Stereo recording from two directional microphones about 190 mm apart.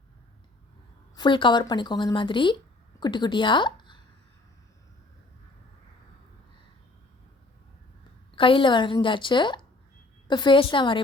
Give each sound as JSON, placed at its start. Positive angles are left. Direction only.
{"t": 1.1, "sound": "a woman's voice", "side_deg": 25}
{"t": 8.4, "sound": "speech", "side_deg": 25}